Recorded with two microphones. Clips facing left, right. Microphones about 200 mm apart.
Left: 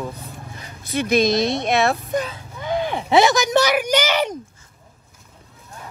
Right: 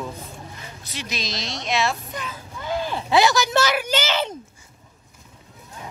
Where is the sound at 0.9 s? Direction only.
55° left (ahead or behind).